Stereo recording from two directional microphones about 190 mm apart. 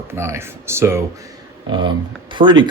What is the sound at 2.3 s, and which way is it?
Speech, 25° right (ahead or behind).